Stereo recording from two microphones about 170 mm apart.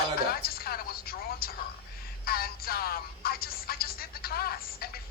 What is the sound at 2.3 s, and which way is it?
Music, 60° left (ahead or behind).